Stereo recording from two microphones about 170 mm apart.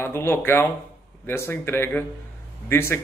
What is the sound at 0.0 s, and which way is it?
A man's voice, 15° left (ahead or behind).